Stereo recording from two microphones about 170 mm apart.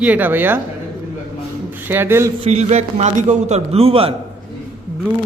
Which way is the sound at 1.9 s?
15° right (ahead or behind).